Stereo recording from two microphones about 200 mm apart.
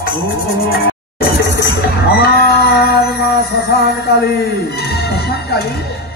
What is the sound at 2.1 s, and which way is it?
Music, 50° left (ahead or behind).